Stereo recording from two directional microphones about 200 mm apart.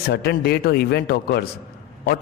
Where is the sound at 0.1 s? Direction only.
50° left (ahead or behind).